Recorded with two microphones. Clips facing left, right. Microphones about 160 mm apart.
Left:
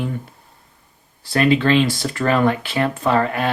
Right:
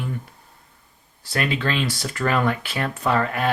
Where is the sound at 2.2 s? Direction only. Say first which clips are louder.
Left 4 dB; 30° left (ahead or behind).